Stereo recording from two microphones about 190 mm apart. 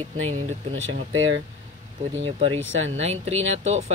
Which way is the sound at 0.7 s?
90° right.